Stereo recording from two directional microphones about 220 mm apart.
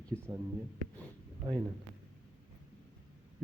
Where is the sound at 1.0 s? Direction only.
20° right (ahead or behind).